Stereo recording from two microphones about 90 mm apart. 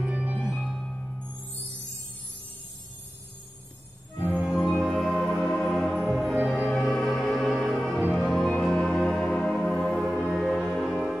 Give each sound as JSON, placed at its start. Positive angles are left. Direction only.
{"t": 0.0, "sound": "music", "side_deg": -15}
{"t": 0.6, "sound": "music", "side_deg": 5}
{"t": 4.4, "sound": "music", "side_deg": -5}
{"t": 9.9, "sound": "music", "side_deg": -5}